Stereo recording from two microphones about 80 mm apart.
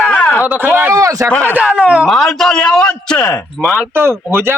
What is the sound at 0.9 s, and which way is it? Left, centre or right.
Speech, right.